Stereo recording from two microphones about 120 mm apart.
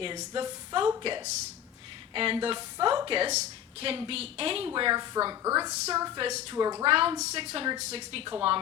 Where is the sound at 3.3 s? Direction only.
60° right (ahead or behind).